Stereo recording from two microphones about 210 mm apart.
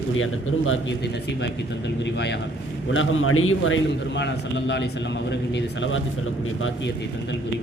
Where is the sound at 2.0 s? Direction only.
55° left (ahead or behind).